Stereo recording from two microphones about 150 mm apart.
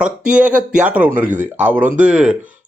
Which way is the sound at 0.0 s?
5° right (ahead or behind).